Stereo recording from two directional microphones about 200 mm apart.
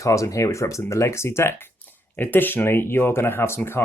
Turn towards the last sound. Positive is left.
turn(degrees=10)  # may be behind; listen again after turning